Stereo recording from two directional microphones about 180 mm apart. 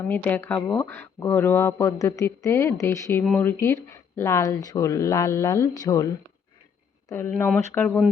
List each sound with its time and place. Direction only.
0.1 s speech: 10° left (ahead or behind)
7.1 s speech: 15° left (ahead or behind)